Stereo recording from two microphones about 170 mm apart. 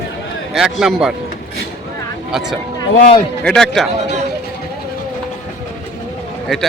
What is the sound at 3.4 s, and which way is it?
Speech, 5° left (ahead or behind).